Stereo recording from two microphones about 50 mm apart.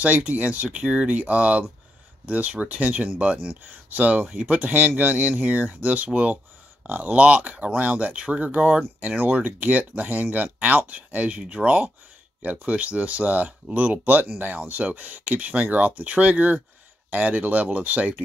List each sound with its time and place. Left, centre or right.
0.0 s speech: right